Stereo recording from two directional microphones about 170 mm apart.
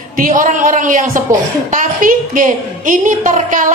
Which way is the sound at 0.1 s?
55° right (ahead or behind).